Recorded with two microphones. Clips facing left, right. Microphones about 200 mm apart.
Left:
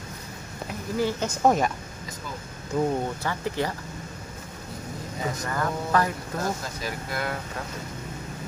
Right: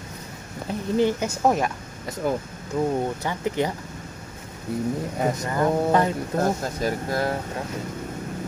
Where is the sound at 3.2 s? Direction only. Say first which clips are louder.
Right 3 dB; 20° right (ahead or behind).